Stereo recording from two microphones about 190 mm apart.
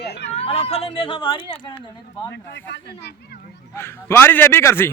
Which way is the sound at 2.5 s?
65° left (ahead or behind).